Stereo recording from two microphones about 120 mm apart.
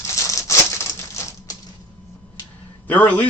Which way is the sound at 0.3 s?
25° left (ahead or behind).